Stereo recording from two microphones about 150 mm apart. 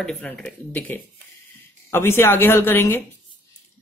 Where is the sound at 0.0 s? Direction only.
5° left (ahead or behind).